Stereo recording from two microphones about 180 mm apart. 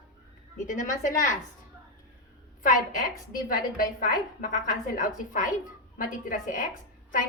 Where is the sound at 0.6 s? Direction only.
45° left (ahead or behind).